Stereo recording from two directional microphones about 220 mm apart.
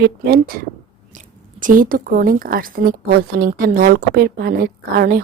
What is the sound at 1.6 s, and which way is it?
A woman's voice, 40° right (ahead or behind).